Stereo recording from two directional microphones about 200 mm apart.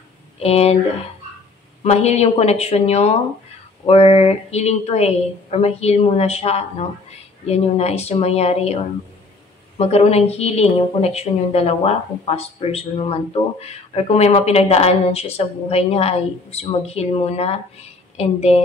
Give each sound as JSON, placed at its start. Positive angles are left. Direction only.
{"t": 0.4, "sound": "a woman's voice", "side_deg": 30}
{"t": 1.8, "sound": "a woman's voice", "side_deg": 35}
{"t": 9.8, "sound": "a woman's voice", "side_deg": 30}